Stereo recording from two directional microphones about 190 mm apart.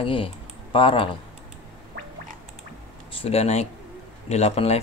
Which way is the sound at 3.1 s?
30° left (ahead or behind).